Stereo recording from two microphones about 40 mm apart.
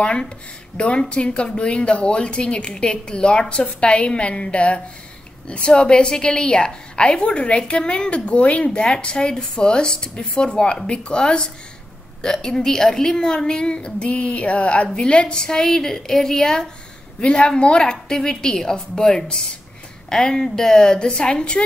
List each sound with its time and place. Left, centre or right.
0.0 s a woman's voice: left
17.2 s a woman's voice: left
18.0 s a woman's voice: centre